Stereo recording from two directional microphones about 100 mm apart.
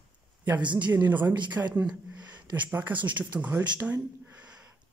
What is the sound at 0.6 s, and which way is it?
Speech, 50° right (ahead or behind).